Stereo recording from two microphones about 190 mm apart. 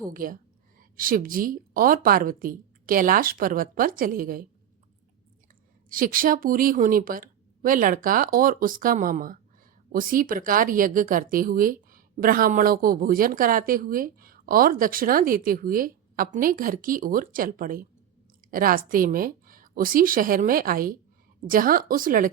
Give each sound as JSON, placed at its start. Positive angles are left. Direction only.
{"t": 0.1, "sound": "speech", "side_deg": -45}
{"t": 5.9, "sound": "speech", "side_deg": -50}